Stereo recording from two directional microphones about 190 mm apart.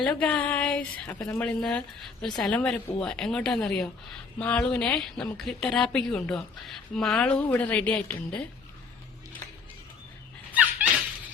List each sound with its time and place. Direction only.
0.0 s a woman's voice: 5° left (ahead or behind)
10.5 s dog: 10° right (ahead or behind)